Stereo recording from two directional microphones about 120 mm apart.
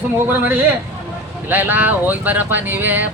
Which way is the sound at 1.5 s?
15° right (ahead or behind).